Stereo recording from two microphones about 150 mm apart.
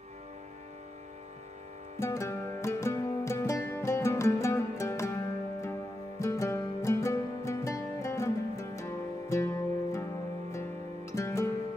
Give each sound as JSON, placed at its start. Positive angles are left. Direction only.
{"t": 2.0, "sound": "music", "side_deg": 20}
{"t": 11.1, "sound": "music", "side_deg": 20}